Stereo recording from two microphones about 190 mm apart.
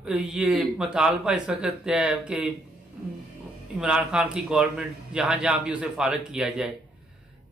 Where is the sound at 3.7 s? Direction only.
5° right (ahead or behind).